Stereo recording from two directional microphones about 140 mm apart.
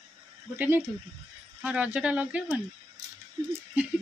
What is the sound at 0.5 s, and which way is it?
Speech, 15° right (ahead or behind).